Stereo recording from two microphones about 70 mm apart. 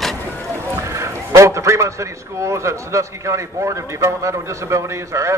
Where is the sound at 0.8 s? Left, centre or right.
Right.